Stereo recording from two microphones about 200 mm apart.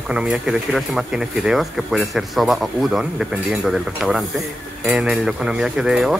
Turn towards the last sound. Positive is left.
turn(degrees=-5)  # may be behind; listen again after turning